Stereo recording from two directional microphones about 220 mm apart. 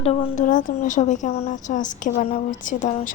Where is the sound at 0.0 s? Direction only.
25° left (ahead or behind).